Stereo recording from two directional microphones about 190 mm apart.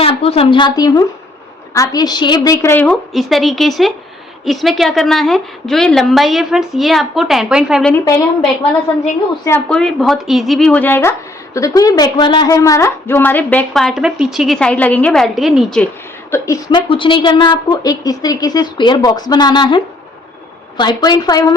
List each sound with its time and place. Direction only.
0.0 s a woman's voice: 30° left (ahead or behind); by 7.9 s centre (ahead or behind)
9.6 s a woman's voice: centre (ahead or behind)
16.3 s a woman's voice: 15° left (ahead or behind)
16.9 s a woman's voice: 25° left (ahead or behind)